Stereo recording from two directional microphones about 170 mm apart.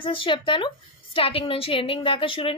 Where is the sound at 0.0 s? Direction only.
30° left (ahead or behind).